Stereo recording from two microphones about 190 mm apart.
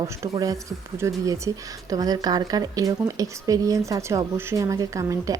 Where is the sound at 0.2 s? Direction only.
20° right (ahead or behind).